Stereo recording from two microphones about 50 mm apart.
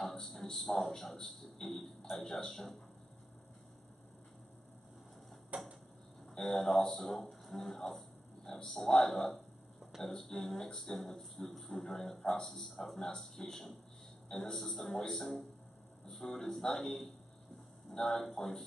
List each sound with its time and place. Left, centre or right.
0.0 s a man's voice: centre
5.5 s a sound: right
6.3 s a man's voice: centre